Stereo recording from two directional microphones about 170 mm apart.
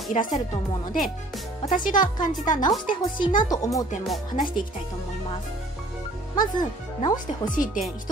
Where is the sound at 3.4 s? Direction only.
20° left (ahead or behind).